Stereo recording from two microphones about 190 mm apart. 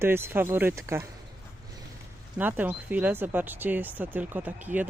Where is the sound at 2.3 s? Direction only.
10° right (ahead or behind).